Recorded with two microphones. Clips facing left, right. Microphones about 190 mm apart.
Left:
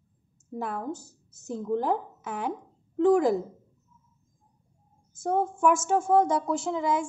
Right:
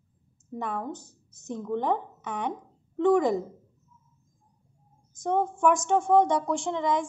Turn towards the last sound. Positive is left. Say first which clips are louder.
# even
turn(degrees=5)  # may be behind; listen again after turning